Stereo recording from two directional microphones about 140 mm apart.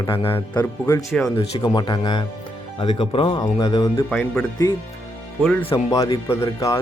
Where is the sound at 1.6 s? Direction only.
30° left (ahead or behind).